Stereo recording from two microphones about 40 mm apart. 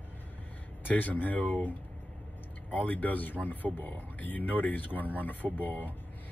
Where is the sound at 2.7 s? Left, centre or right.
Left.